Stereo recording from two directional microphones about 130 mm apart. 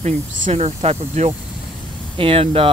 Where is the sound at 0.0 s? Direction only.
55° right (ahead or behind).